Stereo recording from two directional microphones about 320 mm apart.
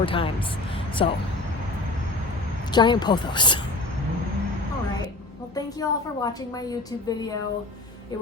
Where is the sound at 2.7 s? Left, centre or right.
Centre.